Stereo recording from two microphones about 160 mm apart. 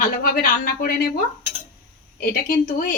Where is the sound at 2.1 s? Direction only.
70° left (ahead or behind).